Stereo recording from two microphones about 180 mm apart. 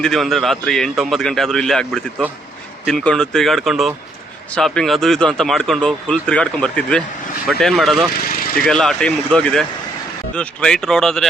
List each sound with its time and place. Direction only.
0.0 s speech: centre (ahead or behind)
8.2 s vehicle: 50° left (ahead or behind)
8.6 s speech: 5° left (ahead or behind)